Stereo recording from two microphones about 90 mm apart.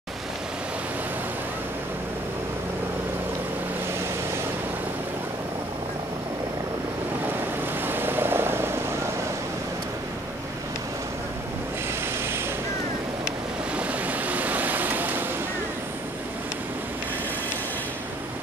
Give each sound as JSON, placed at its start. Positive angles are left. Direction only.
{"t": 7.8, "sound": "vehicle", "side_deg": -25}
{"t": 13.7, "sound": "waves", "side_deg": -15}